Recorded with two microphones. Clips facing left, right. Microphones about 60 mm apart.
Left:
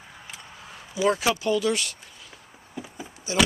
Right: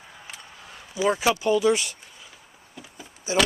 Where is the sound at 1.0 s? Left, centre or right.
Centre.